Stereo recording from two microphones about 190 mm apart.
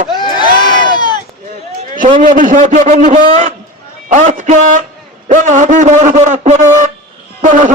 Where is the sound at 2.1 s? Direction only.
45° right (ahead or behind).